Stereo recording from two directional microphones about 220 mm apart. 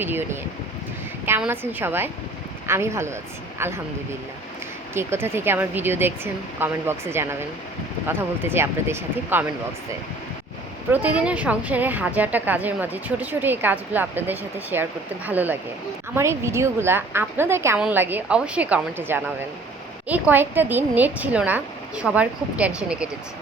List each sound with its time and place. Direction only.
0.0 s a woman's voice: 10° right (ahead or behind)
4.9 s a woman's voice: 10° right (ahead or behind)
10.9 s a woman's voice: 5° right (ahead or behind)